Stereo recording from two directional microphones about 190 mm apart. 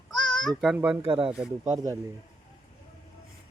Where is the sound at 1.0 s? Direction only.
30° right (ahead or behind).